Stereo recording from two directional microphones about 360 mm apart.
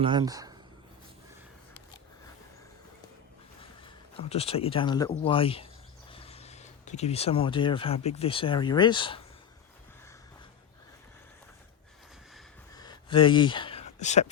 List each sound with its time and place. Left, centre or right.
0.0 s speech: centre
4.2 s speech: centre
12.7 s a sound: centre